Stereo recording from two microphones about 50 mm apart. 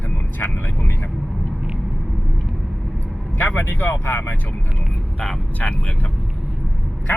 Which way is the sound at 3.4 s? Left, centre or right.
Left.